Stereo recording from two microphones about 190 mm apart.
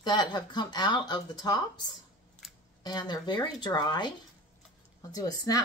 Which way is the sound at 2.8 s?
20° left (ahead or behind).